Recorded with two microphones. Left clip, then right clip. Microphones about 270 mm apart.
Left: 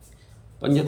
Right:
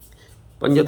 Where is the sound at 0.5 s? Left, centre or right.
Centre.